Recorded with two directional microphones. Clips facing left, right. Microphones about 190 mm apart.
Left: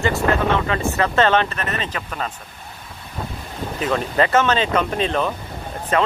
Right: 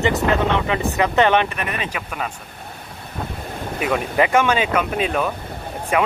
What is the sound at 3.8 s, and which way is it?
Speech, 10° right (ahead or behind).